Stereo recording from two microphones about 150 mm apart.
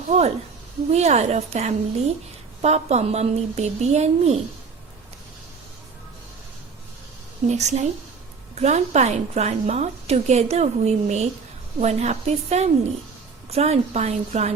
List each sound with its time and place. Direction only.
0.1 s a woman's voice: 45° right (ahead or behind)
7.4 s a woman's voice: 50° right (ahead or behind)